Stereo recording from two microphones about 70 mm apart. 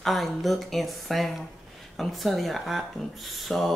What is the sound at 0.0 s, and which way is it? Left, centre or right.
Speech, centre.